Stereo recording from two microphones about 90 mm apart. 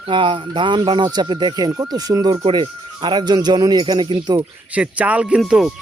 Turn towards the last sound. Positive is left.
turn(degrees=-5)  # may be behind; listen again after turning